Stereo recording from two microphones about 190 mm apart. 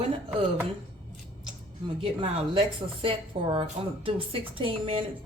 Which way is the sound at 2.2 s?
30° right (ahead or behind).